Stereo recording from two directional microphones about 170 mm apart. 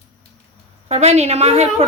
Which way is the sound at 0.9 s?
40° right (ahead or behind).